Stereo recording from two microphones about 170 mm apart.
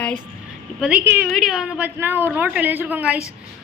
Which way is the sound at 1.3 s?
Centre (ahead or behind).